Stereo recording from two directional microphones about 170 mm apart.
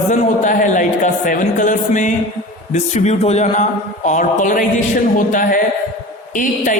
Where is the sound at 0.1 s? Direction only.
50° left (ahead or behind).